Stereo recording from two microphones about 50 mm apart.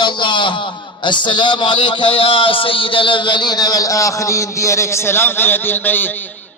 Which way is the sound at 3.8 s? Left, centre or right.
Left.